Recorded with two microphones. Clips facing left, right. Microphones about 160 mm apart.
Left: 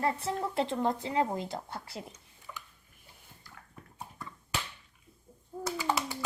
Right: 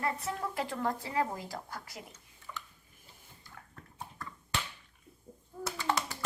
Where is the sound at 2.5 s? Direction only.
5° left (ahead or behind).